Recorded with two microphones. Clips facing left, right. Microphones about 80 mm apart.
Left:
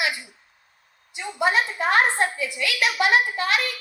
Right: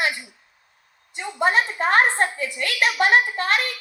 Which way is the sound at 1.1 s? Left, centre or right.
Right.